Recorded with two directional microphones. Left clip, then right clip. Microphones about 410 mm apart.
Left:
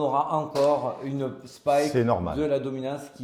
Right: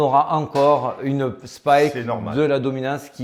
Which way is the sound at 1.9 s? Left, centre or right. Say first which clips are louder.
Left 1 dB; left.